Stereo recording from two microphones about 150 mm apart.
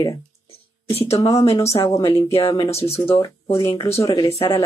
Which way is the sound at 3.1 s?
30° left (ahead or behind).